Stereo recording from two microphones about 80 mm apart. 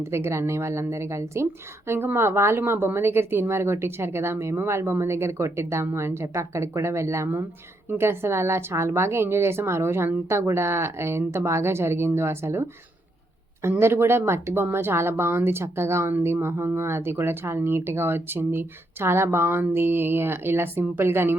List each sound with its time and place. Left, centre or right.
0.1 s speech: right